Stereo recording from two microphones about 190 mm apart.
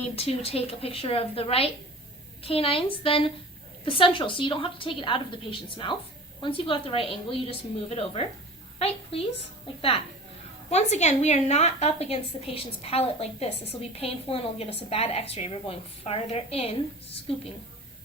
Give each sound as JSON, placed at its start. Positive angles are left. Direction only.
{"t": 0.2, "sound": "a woman's voice", "side_deg": 30}
{"t": 9.7, "sound": "a woman's voice", "side_deg": 30}